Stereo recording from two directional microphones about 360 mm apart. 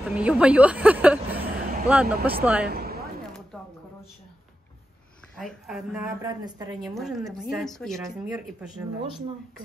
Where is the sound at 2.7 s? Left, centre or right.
Right.